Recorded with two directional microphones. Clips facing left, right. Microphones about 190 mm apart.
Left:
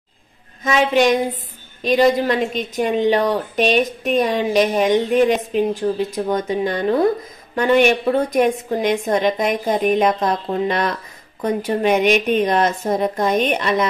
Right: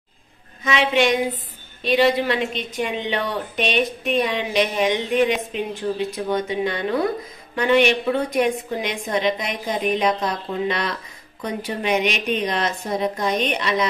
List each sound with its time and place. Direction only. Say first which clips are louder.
0.7 s a woman's voice: left 4 dB; 40° left (ahead or behind)